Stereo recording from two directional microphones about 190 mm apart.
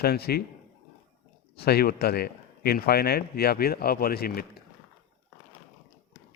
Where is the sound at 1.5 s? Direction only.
55° left (ahead or behind).